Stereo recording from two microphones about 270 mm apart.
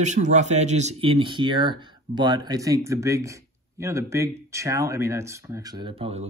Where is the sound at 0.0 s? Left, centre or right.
Right.